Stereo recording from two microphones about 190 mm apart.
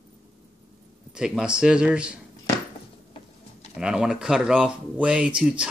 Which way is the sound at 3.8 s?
5° right (ahead or behind).